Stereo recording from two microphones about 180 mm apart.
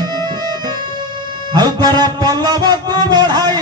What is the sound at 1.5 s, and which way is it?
Music, 25° right (ahead or behind).